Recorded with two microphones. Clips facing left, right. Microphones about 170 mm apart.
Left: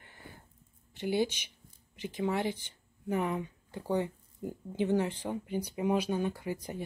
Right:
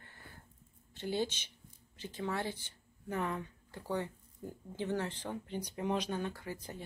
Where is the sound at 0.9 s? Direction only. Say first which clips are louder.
Left 5 dB; 10° left (ahead or behind).